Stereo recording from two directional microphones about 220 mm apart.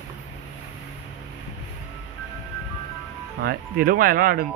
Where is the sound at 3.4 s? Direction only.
40° right (ahead or behind).